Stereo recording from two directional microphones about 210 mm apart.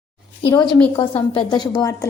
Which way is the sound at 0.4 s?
20° left (ahead or behind).